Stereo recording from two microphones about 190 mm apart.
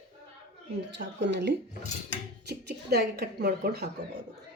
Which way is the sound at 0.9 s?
70° right (ahead or behind).